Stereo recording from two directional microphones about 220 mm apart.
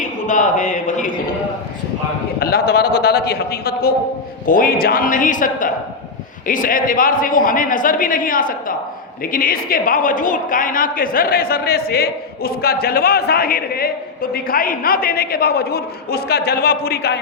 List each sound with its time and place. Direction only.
0.0 s a man's voice: 35° left (ahead or behind)
2.4 s a woman's voice: 45° left (ahead or behind)